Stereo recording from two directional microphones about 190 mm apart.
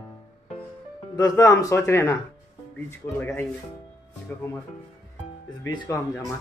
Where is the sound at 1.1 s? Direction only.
20° left (ahead or behind).